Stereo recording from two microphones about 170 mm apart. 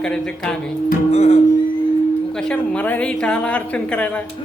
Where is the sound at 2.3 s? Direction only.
5° left (ahead or behind).